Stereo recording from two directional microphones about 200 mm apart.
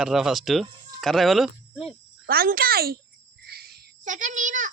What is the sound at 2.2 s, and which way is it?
Speech, 45° right (ahead or behind).